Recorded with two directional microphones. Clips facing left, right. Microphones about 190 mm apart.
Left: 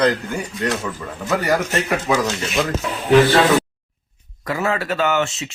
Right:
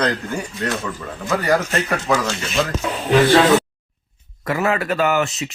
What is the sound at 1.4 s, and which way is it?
Speech, 10° left (ahead or behind).